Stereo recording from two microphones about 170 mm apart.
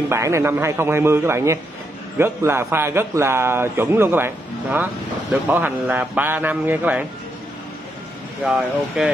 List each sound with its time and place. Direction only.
0.1 s a man's voice: 15° right (ahead or behind)
8.5 s speech: 5° right (ahead or behind)